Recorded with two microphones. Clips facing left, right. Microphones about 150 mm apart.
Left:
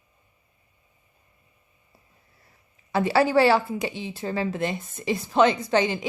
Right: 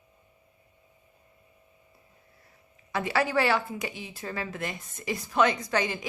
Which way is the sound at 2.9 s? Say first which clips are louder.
Left 7 dB; 30° left (ahead or behind).